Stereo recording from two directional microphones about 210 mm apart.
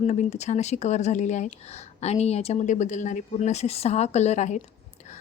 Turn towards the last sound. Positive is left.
turn(degrees=35)  # may be behind; listen again after turning